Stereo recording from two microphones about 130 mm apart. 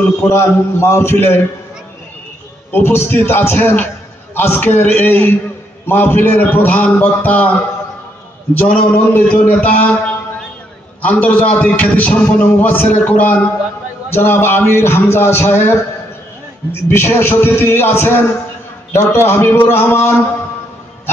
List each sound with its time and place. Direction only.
0.2 s a man's voice: 20° left (ahead or behind)
2.7 s a man's voice: 15° left (ahead or behind)
8.5 s a man's voice: 10° left (ahead or behind)
16.9 s a man's voice: 20° left (ahead or behind)